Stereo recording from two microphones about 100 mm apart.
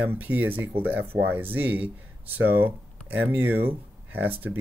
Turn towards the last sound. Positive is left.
turn(degrees=-20)  # may be behind; listen again after turning